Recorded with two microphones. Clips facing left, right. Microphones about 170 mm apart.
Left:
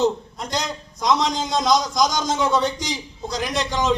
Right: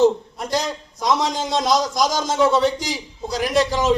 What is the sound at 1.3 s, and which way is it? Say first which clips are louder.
Speech: even; 5° right (ahead or behind).